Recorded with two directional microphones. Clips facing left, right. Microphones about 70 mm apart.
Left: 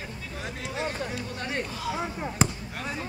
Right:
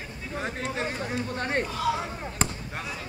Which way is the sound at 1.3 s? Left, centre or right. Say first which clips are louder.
Right 4 dB; right.